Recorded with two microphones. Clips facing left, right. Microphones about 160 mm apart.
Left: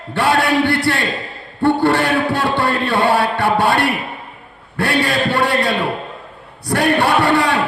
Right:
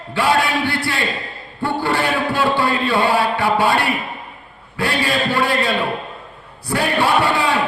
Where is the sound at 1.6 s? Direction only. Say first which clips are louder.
Left 6 dB; 60° left (ahead or behind).